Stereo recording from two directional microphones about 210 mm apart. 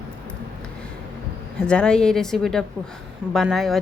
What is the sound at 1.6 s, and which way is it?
A woman's voice, 5° left (ahead or behind).